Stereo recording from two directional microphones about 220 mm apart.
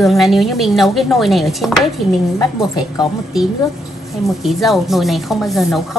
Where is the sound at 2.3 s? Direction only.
20° left (ahead or behind).